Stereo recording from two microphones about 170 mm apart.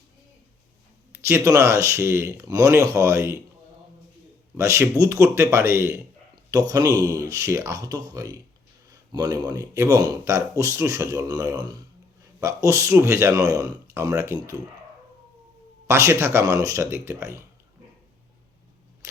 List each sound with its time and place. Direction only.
1.1 s speech: 15° right (ahead or behind)
4.5 s speech: 15° right (ahead or behind)
15.9 s speech: 15° right (ahead or behind)